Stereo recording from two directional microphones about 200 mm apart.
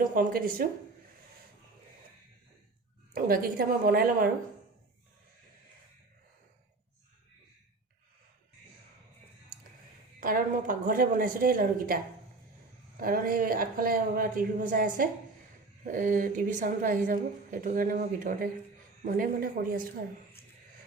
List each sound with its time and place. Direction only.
0.0 s a woman's voice: 40° right (ahead or behind)
3.1 s a woman's voice: 45° right (ahead or behind)
10.2 s a woman's voice: 40° right (ahead or behind)
13.0 s a woman's voice: 45° right (ahead or behind)